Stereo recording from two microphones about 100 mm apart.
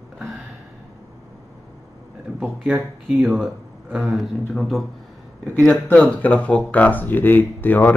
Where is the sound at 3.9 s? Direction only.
5° right (ahead or behind).